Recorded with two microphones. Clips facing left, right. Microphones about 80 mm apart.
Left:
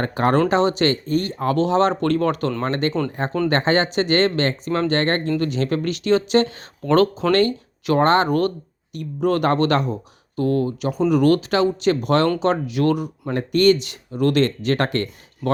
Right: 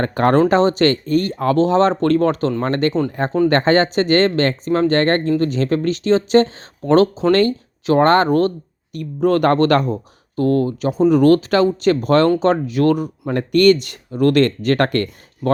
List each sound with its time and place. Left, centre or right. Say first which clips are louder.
0.0 s speech: right 4 dB; right
7.3 s speech: right 2 dB; right
8.3 s speech: right 4 dB; right
8.9 s speech: right 4 dB; right
13.3 s speech: right 3 dB; right